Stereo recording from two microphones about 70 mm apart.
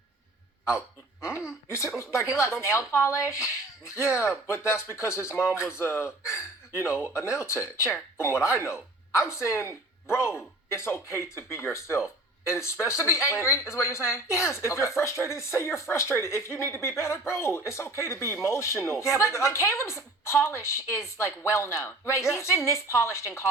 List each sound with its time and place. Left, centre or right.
1.6 s speech: left